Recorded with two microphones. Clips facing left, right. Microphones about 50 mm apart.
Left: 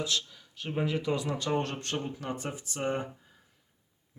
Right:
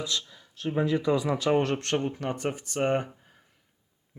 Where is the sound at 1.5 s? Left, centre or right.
Right.